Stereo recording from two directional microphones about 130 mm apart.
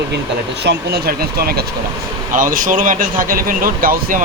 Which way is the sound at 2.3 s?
90° right.